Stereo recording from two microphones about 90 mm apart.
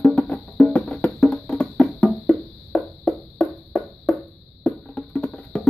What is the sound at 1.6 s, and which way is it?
Music, 15° left (ahead or behind).